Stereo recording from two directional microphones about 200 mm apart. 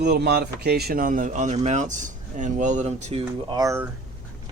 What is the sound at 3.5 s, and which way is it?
Speech, 15° right (ahead or behind).